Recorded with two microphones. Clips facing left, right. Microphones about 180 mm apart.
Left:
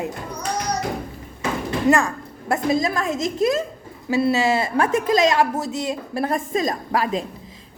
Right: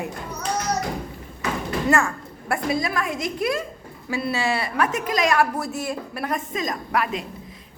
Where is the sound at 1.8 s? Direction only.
20° left (ahead or behind).